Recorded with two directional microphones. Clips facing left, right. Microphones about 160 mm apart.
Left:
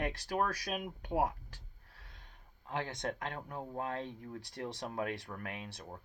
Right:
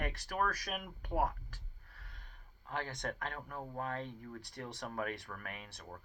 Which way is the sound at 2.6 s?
25° left (ahead or behind).